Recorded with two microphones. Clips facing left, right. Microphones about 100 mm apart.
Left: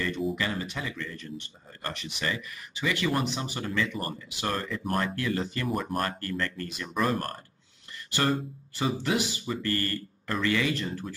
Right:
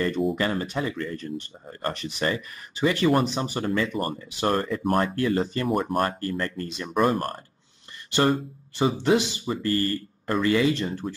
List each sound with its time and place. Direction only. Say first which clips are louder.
0.4 s speech: right 6 dB; 40° right (ahead or behind)